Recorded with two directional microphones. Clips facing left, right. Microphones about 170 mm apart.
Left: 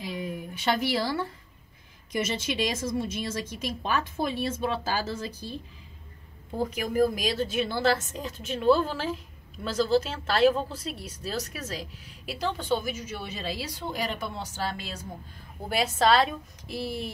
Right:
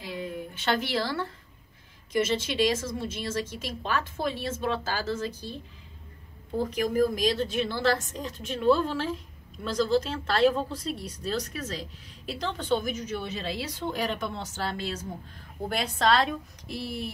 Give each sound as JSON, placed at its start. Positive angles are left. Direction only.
{"t": 0.0, "sound": "a woman's voice", "side_deg": 10}
{"t": 6.8, "sound": "a woman's voice", "side_deg": 5}